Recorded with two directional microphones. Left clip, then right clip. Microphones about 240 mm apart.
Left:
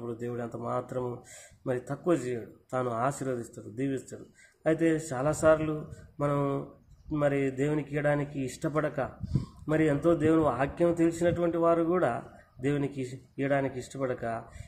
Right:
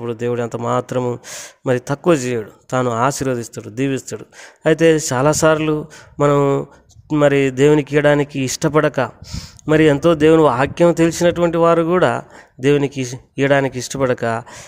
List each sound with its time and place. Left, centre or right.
0.0 s speech: right